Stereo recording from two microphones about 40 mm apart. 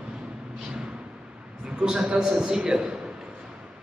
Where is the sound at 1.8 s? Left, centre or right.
Right.